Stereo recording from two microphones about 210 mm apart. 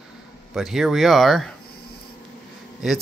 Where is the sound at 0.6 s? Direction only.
Centre (ahead or behind).